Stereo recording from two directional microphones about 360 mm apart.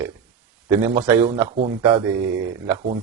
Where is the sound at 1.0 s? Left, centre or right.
Centre.